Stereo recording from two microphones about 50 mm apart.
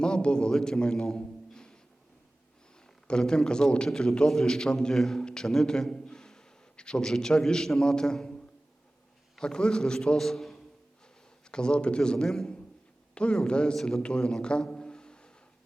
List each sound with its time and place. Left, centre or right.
0.0 s a man's voice: centre
2.8 s a man's voice: centre
9.4 s a man's voice: centre
11.5 s a man's voice: centre
14.4 s a sound: centre